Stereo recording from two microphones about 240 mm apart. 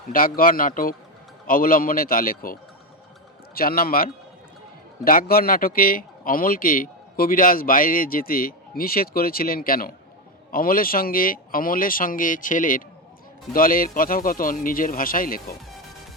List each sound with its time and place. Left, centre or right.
0.1 s speech: left